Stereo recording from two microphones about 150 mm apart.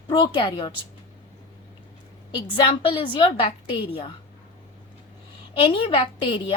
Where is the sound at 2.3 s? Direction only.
30° left (ahead or behind).